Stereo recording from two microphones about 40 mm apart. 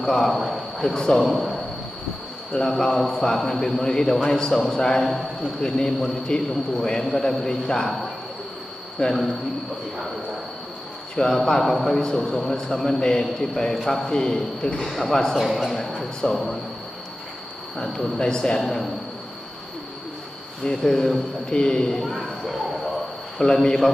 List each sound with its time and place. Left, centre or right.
0.0 s a man's voice: centre
0.9 s a man's voice: centre
1.2 s a man's voice: centre
2.6 s a man's voice: centre
9.0 s a man's voice: left
11.1 s a man's voice: centre
14.8 s speech: centre
16.0 s a man's voice: centre
18.2 s a man's voice: centre
18.6 s speech: centre
20.7 s a man's voice: centre
22.0 s a sound: centre
23.4 s a man's voice: centre